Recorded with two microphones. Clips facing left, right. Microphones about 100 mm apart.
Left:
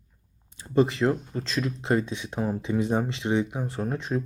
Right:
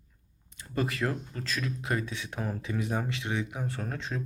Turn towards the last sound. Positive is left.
turn(degrees=15)  # may be behind; listen again after turning